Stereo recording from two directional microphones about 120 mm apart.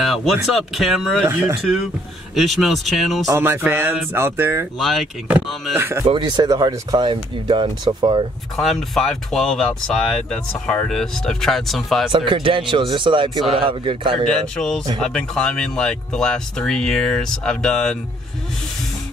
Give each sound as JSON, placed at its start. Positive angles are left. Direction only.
{"t": 0.0, "sound": "speech", "side_deg": 0}
{"t": 1.2, "sound": "speech", "side_deg": -20}
{"t": 2.3, "sound": "speech", "side_deg": 0}
{"t": 3.3, "sound": "speech", "side_deg": -20}
{"t": 4.7, "sound": "speech", "side_deg": 0}
{"t": 5.8, "sound": "speech", "side_deg": -20}
{"t": 6.0, "sound": "speech", "side_deg": -40}
{"t": 8.5, "sound": "speech", "side_deg": 0}
{"t": 12.1, "sound": "speech", "side_deg": -45}
{"t": 14.2, "sound": "speech", "side_deg": 5}